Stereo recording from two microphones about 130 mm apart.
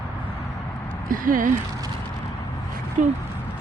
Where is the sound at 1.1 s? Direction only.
90° right.